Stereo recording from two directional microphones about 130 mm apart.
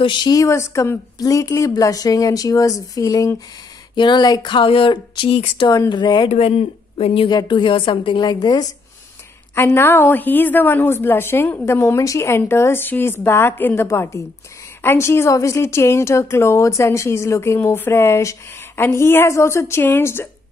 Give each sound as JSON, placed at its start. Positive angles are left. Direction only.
{"t": 0.0, "sound": "a woman's voice", "side_deg": 35}
{"t": 6.3, "sound": "speech", "side_deg": 55}
{"t": 7.2, "sound": "speech", "side_deg": 35}
{"t": 9.6, "sound": "a woman's voice", "side_deg": 15}